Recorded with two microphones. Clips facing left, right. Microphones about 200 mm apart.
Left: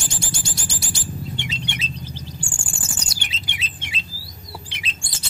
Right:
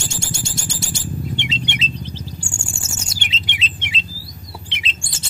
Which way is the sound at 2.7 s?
25° right (ahead or behind).